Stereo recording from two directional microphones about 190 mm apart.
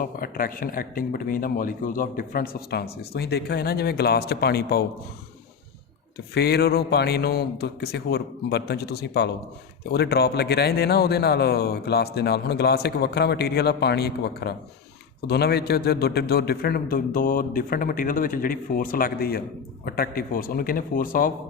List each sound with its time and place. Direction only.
0.0 s a man's voice: 50° left (ahead or behind)
6.3 s a man's voice: 60° left (ahead or behind)